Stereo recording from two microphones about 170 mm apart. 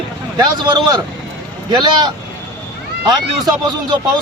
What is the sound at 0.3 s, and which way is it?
Speech, 25° right (ahead or behind).